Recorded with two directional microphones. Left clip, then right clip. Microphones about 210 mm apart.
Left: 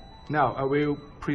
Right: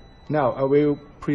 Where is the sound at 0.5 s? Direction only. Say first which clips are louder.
Right 6 dB; 25° right (ahead or behind).